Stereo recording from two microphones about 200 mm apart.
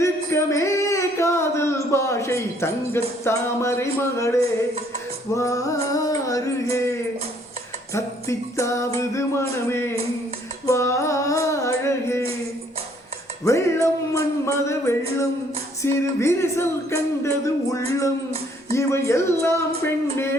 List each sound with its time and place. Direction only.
0.0 s a sound: 15° left (ahead or behind)
3.2 s speech: 15° left (ahead or behind)
7.9 s speech: 15° left (ahead or behind)
13.4 s speech: 15° left (ahead or behind)